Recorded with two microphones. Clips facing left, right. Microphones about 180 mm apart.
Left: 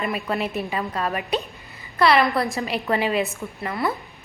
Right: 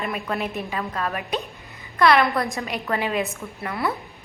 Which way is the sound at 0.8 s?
15° left (ahead or behind).